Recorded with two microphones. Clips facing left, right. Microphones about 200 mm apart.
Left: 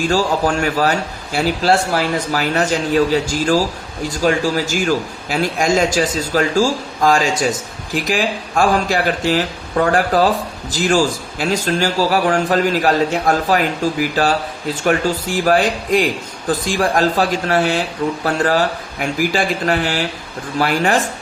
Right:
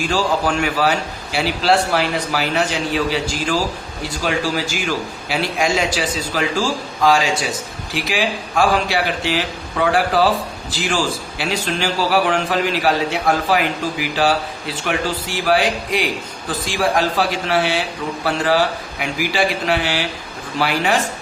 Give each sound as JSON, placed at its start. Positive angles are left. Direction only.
{"t": 0.0, "sound": "a man's voice", "side_deg": 45}